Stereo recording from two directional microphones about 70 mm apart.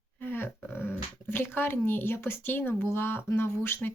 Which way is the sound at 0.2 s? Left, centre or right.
Left.